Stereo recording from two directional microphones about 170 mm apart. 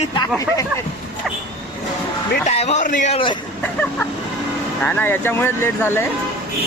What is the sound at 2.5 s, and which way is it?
Speech, 40° left (ahead or behind).